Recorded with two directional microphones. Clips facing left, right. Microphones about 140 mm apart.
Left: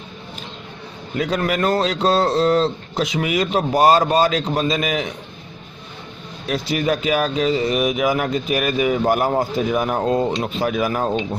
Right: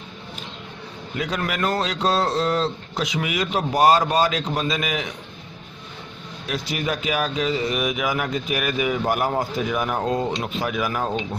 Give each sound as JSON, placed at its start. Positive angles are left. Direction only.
{"t": 1.1, "sound": "speech", "side_deg": 35}
{"t": 6.5, "sound": "speech", "side_deg": 35}